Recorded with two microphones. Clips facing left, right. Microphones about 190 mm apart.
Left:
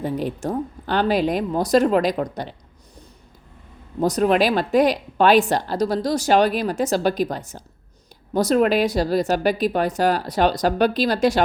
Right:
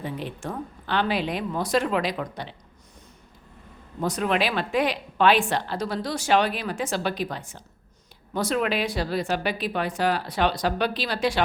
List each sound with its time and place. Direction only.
0.0 s a woman's voice: 40° left (ahead or behind)
4.0 s a woman's voice: 40° left (ahead or behind)